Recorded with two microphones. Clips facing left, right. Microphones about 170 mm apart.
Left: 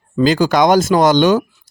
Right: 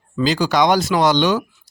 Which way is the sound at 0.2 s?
50° left (ahead or behind).